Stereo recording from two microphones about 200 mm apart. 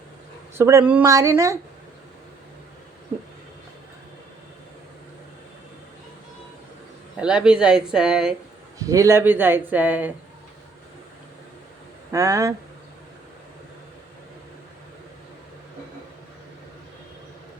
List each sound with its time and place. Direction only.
0.5 s speech: 10° right (ahead or behind)
7.2 s speech: 5° right (ahead or behind)
8.9 s speech: 15° right (ahead or behind)
12.1 s speech: 15° right (ahead or behind)